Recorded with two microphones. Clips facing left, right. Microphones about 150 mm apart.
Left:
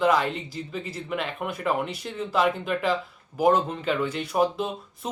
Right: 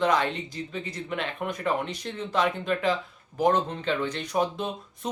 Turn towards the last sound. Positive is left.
turn(degrees=5)  # may be behind; listen again after turning